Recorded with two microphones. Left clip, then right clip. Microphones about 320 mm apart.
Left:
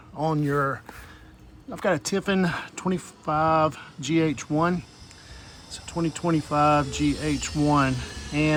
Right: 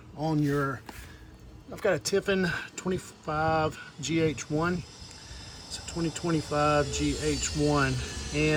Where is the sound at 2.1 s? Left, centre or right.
Left.